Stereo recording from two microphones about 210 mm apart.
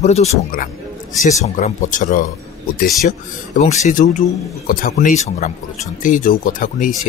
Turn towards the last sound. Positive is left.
turn(degrees=40)  # may be behind; listen again after turning